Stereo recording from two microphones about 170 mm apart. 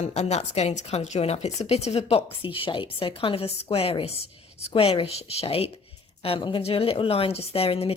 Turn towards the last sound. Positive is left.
turn(degrees=35)  # may be behind; listen again after turning